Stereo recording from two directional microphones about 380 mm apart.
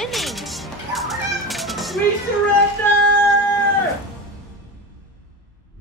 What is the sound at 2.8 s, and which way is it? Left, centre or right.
Music, centre.